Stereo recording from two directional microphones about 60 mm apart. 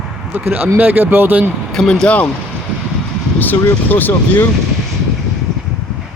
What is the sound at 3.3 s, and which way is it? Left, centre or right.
Speech, left.